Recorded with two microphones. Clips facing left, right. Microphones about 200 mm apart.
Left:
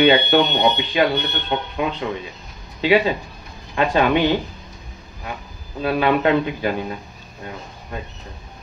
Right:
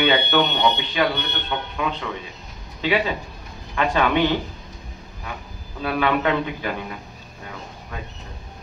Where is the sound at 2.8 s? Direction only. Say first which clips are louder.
Left 5 dB; 40° left (ahead or behind).